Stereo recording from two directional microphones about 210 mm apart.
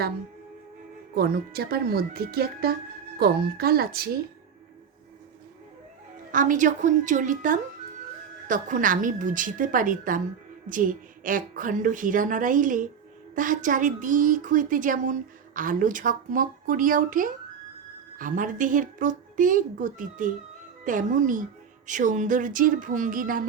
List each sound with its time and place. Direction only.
1.1 s speech: 50° right (ahead or behind)
6.3 s a woman's voice: 35° right (ahead or behind)